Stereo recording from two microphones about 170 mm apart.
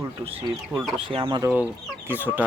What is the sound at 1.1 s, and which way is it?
Speech, 30° right (ahead or behind).